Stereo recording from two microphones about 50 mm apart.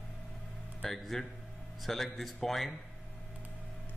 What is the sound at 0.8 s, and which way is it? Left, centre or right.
Speech, centre.